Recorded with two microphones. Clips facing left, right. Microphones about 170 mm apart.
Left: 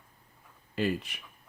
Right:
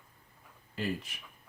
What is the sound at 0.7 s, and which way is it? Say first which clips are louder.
Speech: left 5 dB; 75° left (ahead or behind).